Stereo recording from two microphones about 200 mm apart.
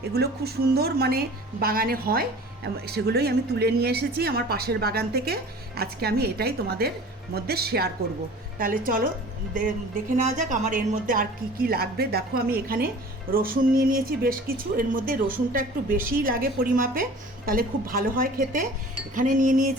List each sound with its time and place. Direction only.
0.1 s speech: 55° right (ahead or behind)
10.2 s speech: 40° right (ahead or behind)
19.1 s cutlery: 40° right (ahead or behind)